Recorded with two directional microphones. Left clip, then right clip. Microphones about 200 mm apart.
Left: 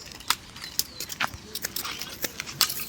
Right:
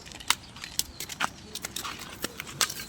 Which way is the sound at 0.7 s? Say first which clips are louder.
Left 2 dB; 5° right (ahead or behind).